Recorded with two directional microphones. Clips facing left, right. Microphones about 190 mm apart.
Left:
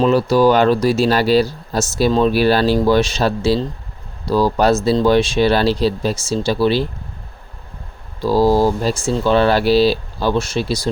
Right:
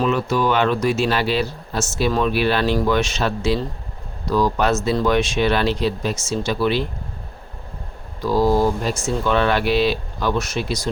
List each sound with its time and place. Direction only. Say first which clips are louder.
0.0 s speech: left 7 dB; 35° left (ahead or behind)
8.2 s speech: left 3 dB; 30° left (ahead or behind)